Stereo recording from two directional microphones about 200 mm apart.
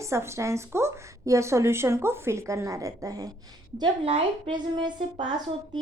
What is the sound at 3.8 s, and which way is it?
A woman's voice, 30° right (ahead or behind).